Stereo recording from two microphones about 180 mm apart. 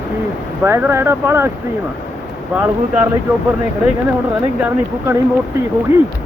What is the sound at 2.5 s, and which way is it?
Speech, 10° right (ahead or behind).